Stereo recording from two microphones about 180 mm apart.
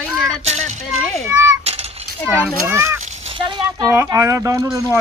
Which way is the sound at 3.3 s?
25° right (ahead or behind).